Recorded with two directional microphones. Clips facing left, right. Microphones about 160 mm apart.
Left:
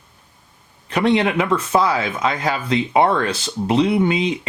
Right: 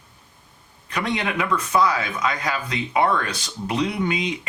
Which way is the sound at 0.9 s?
30° left (ahead or behind).